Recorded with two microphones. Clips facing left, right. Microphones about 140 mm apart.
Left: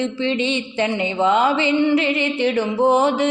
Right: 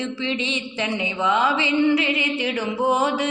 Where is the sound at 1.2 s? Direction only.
40° left (ahead or behind).